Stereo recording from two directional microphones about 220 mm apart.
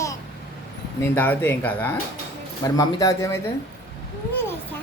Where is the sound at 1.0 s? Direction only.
10° left (ahead or behind).